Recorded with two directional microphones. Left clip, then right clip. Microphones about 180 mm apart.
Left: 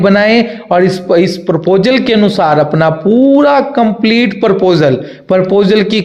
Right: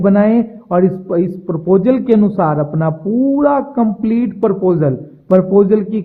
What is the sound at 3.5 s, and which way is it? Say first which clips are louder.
Speech: left 6 dB; 20° left (ahead or behind).